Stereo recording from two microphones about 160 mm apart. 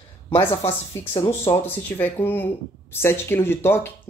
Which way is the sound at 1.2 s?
15° left (ahead or behind).